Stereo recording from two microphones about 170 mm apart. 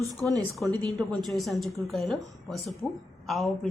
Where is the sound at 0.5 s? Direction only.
Centre (ahead or behind).